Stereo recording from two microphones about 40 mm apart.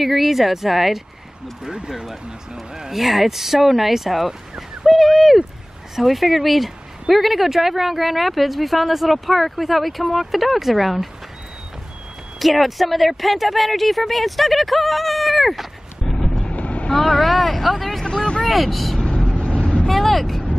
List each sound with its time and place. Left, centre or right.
0.0 s speech: centre
1.6 s a man's voice: centre
12.4 s speech: centre
16.1 s vehicle: centre
16.5 s vehicle: left
16.9 s a sound: centre
18.4 s speech: centre
19.3 s vehicle: left
19.9 s vehicle: centre